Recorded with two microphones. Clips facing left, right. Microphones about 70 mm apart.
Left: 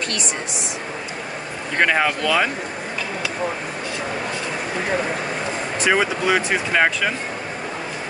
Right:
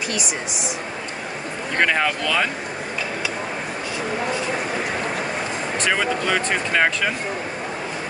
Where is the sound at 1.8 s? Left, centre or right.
Centre.